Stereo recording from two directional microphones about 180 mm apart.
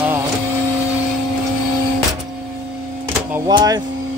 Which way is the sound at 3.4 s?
20° right (ahead or behind).